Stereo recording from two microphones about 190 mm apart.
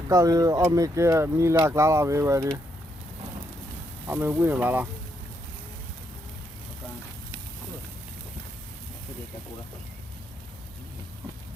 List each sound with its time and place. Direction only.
0.1 s speech: 20° right (ahead or behind)
4.0 s speech: 10° right (ahead or behind)